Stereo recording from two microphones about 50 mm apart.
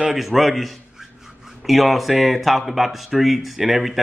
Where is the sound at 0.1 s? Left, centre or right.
Centre.